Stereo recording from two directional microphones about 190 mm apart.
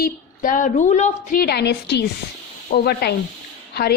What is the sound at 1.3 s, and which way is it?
A woman's voice, 55° left (ahead or behind).